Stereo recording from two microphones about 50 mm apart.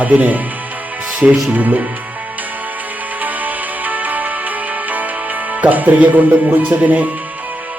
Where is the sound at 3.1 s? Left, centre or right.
Right.